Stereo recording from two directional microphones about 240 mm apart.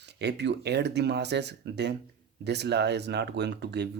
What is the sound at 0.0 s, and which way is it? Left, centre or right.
Speech, right.